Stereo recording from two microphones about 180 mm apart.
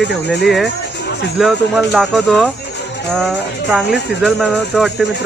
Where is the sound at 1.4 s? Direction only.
Centre (ahead or behind).